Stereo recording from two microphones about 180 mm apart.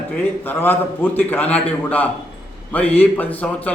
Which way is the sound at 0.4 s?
10° left (ahead or behind).